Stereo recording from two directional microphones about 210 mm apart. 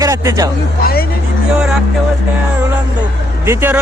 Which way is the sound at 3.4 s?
10° right (ahead or behind).